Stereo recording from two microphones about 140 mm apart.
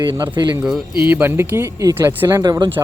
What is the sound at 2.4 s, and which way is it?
Speech, 30° right (ahead or behind).